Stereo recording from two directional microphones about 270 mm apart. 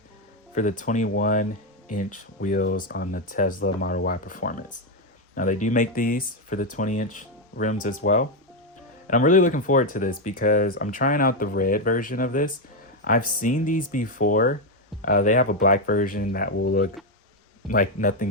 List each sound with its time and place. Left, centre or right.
0.5 s speech: left
17.7 s speech: left